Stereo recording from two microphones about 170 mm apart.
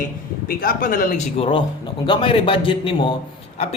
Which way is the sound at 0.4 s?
60° left (ahead or behind).